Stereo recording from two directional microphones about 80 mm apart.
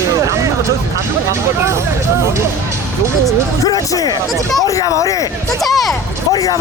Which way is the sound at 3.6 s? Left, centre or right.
Left.